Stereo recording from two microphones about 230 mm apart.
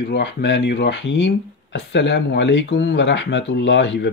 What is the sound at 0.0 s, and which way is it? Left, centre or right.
Speech, left.